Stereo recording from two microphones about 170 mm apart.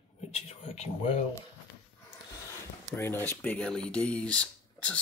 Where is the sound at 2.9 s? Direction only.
10° left (ahead or behind).